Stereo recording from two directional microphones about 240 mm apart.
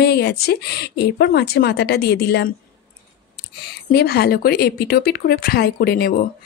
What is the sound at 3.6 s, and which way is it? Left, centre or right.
Speech, left.